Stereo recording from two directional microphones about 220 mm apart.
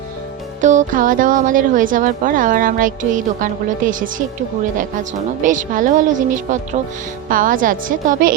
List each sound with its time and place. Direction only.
0.6 s speech: 35° right (ahead or behind)